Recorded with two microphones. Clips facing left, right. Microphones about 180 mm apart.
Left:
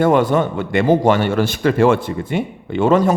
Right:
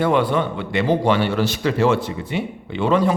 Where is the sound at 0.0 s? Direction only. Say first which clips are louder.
Left 4 dB; 45° left (ahead or behind).